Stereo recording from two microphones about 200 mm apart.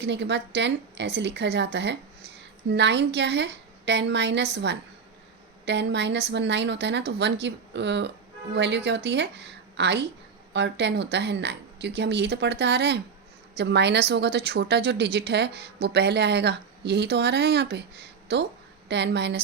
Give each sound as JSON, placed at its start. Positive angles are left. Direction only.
{"t": 0.0, "sound": "a woman's voice", "side_deg": -60}